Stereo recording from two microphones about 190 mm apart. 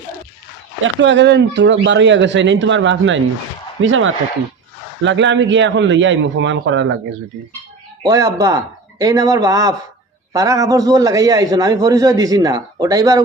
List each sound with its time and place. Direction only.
0.8 s speech: 70° right (ahead or behind)
3.8 s speech: 90° right
5.0 s speech: 70° right (ahead or behind)
8.0 s a man's voice: 15° right (ahead or behind)